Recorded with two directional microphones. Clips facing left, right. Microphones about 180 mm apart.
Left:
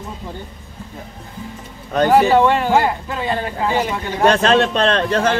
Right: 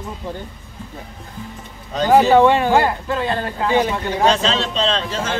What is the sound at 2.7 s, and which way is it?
Speech, 10° left (ahead or behind).